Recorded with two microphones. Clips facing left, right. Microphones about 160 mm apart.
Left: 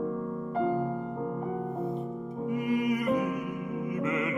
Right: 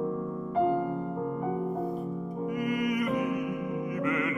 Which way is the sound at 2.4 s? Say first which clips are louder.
Left 1 dB; 25° left (ahead or behind).